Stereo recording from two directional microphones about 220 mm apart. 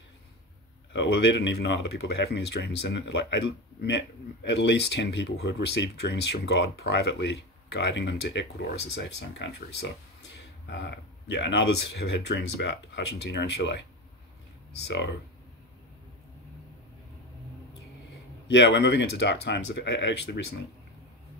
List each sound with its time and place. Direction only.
0.9 s speech: 55° left (ahead or behind)
18.5 s speech: 55° left (ahead or behind)